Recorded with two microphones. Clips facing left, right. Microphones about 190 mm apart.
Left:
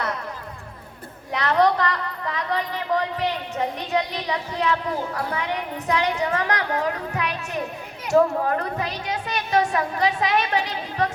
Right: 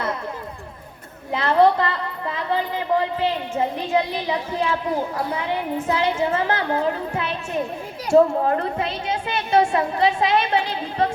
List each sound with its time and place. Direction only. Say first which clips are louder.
1.3 s a woman's voice: right 3 dB; 25° right (ahead or behind)